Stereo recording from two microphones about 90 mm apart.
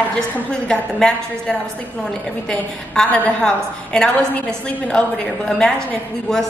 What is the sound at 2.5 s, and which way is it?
A woman's voice, 10° left (ahead or behind).